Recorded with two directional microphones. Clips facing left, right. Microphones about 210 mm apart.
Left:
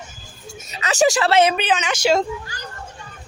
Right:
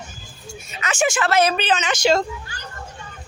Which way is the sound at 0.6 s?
40° left (ahead or behind).